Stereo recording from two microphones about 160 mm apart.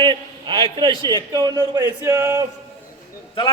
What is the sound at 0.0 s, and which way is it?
A man's voice, 30° right (ahead or behind).